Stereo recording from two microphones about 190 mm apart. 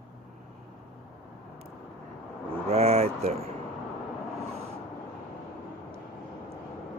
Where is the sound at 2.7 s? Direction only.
35° right (ahead or behind).